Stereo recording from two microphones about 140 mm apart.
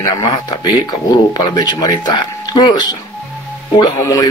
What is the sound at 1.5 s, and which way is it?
Speech, 30° left (ahead or behind).